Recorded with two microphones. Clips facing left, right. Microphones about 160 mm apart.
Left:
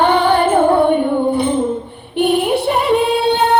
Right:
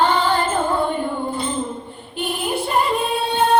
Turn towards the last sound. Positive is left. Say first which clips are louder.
# left 4 dB
turn(degrees=70)  # may be behind; listen again after turning